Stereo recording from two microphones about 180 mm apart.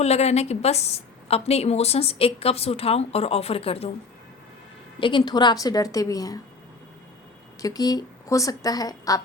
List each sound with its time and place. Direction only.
0.0 s a woman's voice: 35° left (ahead or behind)
4.9 s a woman's voice: 25° left (ahead or behind)
7.6 s a woman's voice: 20° left (ahead or behind)